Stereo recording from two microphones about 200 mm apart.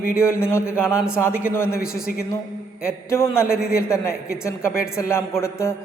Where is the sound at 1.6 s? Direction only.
50° left (ahead or behind).